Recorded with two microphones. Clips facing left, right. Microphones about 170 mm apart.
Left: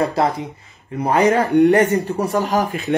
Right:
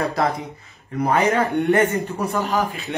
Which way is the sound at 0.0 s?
30° left (ahead or behind).